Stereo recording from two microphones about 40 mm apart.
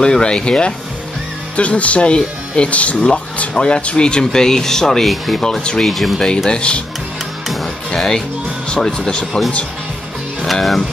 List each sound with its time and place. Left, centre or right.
0.0 s speech: left
1.6 s speech: left
3.5 s speech: left; by 5.4 s centre
5.4 s speech: centre
5.9 s speech: centre
6.1 s speech: centre
7.9 s speech: centre
10.4 s speech: centre